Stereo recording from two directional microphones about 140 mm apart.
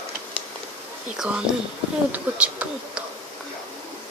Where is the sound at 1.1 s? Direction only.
5° right (ahead or behind).